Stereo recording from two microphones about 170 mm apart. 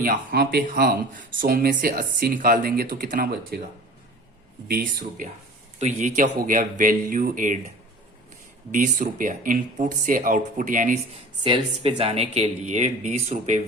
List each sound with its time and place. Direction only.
0.0 s speech: 55° right (ahead or behind)
4.7 s speech: 50° right (ahead or behind)
8.7 s speech: 50° right (ahead or behind)
11.4 s speech: 30° right (ahead or behind)